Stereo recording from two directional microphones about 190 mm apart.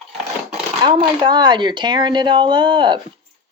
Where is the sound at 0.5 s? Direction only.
30° right (ahead or behind).